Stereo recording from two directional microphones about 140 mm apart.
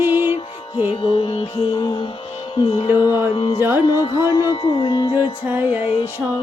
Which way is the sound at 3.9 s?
30° left (ahead or behind).